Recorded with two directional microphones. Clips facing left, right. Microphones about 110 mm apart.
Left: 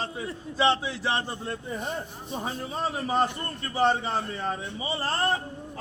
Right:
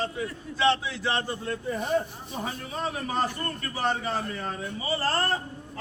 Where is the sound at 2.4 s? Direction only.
25° left (ahead or behind).